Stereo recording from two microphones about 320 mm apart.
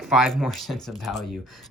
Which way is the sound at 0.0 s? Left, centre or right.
Centre.